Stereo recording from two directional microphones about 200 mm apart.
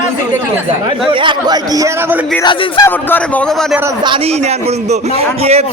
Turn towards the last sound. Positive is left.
turn(degrees=-30)  # may be behind; listen again after turning